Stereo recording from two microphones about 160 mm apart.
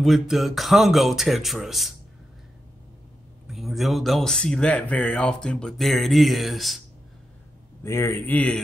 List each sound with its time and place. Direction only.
0.0 s speech: centre (ahead or behind)
3.4 s speech: centre (ahead or behind)
7.8 s a man's voice: 15° left (ahead or behind)